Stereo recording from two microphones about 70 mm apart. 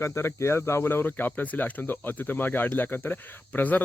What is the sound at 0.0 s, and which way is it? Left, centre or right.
Speech, left.